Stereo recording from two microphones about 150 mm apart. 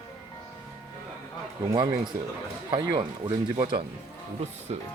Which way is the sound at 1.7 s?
25° right (ahead or behind).